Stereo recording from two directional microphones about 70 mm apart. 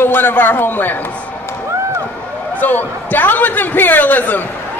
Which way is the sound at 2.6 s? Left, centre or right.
Left.